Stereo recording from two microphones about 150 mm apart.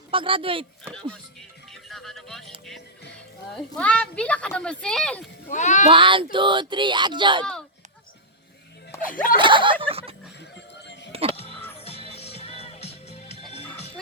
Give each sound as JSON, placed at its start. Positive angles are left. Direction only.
{"t": 0.1, "sound": "speech", "side_deg": -35}
{"t": 1.7, "sound": "music", "side_deg": 0}
{"t": 3.5, "sound": "speech", "side_deg": 10}
{"t": 5.5, "sound": "a child's voice", "side_deg": 55}
{"t": 5.9, "sound": "speech", "side_deg": -35}
{"t": 9.0, "sound": "speech", "side_deg": 65}
{"t": 9.4, "sound": "speech", "side_deg": -35}
{"t": 9.8, "sound": "a sound", "side_deg": -40}
{"t": 11.1, "sound": "music", "side_deg": -40}
{"t": 11.8, "sound": "music", "side_deg": 40}